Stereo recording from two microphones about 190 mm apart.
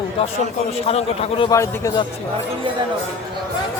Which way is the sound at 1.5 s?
20° left (ahead or behind).